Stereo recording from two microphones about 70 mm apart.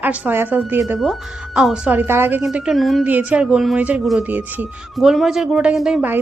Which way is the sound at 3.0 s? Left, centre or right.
Centre.